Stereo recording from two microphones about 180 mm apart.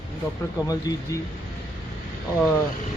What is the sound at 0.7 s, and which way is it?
Speech, 20° left (ahead or behind).